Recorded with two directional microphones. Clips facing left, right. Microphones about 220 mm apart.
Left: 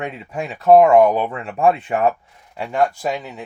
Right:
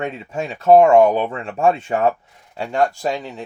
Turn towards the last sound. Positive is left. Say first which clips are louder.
# right 1 dB
turn(degrees=-25)  # may be behind; listen again after turning